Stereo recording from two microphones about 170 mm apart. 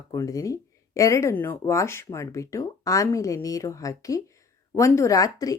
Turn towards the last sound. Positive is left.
turn(degrees=20)  # may be behind; listen again after turning